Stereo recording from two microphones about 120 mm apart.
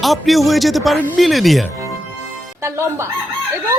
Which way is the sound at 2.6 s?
25° right (ahead or behind).